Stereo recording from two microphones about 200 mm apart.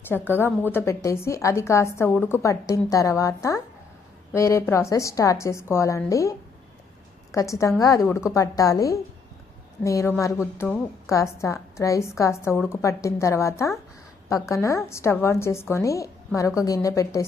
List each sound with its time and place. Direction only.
0.1 s a woman's voice: 10° left (ahead or behind)
7.3 s a woman's voice: 15° left (ahead or behind)